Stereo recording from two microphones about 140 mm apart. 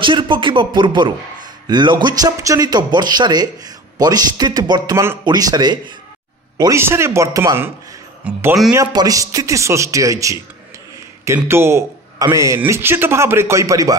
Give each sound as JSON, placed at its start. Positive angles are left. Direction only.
{"t": 0.0, "sound": "a man's voice", "side_deg": -35}
{"t": 6.6, "sound": "a man's voice", "side_deg": -20}